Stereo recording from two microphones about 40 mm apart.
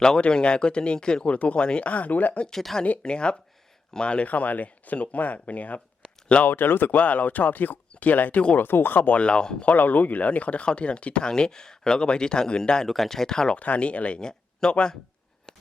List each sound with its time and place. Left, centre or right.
0.2 s speech: left
2.5 s speech: centre
3.0 s speech: left
4.3 s speech: left
6.0 s a sound: left
6.5 s speech: left
8.5 s speech: left
9.1 s speech: left
9.6 s speech: left; by 12.9 s centre
12.9 s speech: centre
13.6 s speech: left
14.2 s a sound: centre
14.7 s speech: left